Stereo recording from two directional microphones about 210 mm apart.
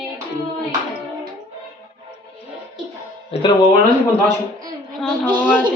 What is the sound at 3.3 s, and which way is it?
Music, 30° left (ahead or behind).